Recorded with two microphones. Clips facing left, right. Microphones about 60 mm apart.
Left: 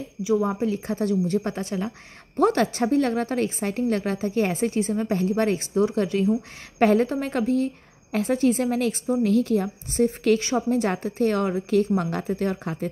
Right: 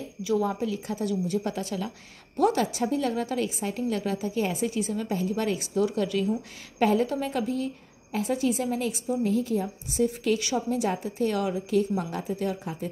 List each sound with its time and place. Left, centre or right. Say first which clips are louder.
0.2 s speech: left 3 dB; left
0.7 s a woman's voice: left 5 dB; left
2.3 s a woman's voice: left 3 dB; left
6.8 s a woman's voice: left 4 dB; left